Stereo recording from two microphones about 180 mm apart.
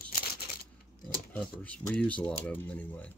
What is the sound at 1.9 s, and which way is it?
Speech, 10° left (ahead or behind).